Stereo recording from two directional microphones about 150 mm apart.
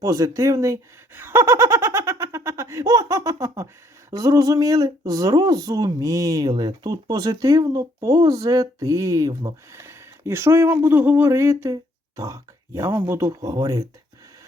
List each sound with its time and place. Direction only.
0.0 s speech: 25° right (ahead or behind)